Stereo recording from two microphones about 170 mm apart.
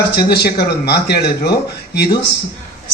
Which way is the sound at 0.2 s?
65° left (ahead or behind).